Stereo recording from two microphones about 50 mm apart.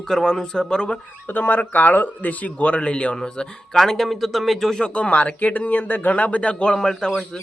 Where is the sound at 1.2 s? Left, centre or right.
Left; by 4.8 s centre.